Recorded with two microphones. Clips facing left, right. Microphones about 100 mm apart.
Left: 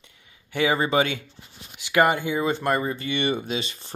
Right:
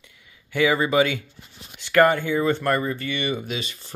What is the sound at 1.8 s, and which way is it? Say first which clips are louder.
Speech: right 3 dB; 15° left (ahead or behind).